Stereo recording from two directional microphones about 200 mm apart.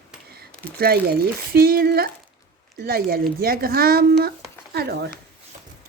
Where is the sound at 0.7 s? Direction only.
50° right (ahead or behind).